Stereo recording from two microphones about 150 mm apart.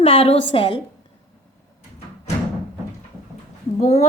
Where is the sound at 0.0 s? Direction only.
40° left (ahead or behind).